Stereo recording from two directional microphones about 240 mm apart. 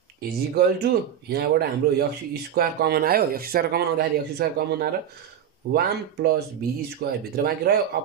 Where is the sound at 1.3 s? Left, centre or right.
Right.